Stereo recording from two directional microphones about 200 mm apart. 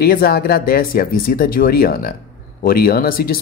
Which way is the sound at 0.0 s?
50° left (ahead or behind).